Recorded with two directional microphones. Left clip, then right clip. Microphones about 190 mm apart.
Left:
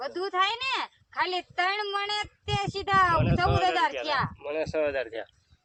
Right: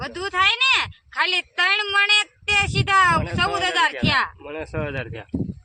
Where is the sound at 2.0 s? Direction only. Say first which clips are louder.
Right 12 dB; 15° left (ahead or behind).